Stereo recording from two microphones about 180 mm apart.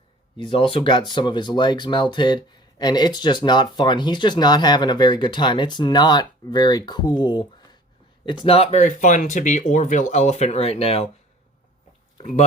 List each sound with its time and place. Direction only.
0.3 s speech: 30° left (ahead or behind)